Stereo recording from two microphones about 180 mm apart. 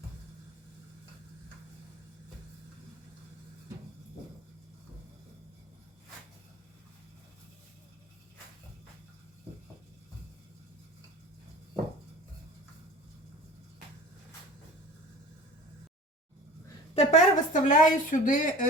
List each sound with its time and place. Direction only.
16.9 s a woman's voice: 35° left (ahead or behind)